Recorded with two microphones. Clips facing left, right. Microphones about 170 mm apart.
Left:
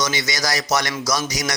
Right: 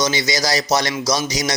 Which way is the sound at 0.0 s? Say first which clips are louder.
Right 4 dB; 30° right (ahead or behind).